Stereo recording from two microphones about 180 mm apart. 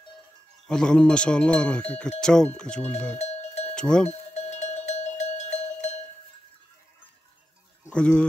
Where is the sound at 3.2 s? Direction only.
35° left (ahead or behind).